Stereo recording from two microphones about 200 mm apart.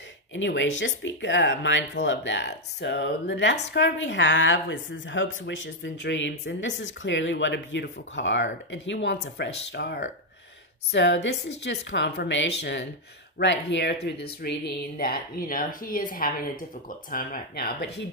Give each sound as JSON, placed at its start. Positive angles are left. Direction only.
{"t": 0.3, "sound": "a woman's voice", "side_deg": 65}